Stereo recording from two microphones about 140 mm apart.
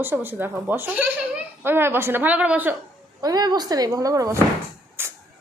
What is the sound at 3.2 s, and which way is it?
A woman's voice, 25° right (ahead or behind).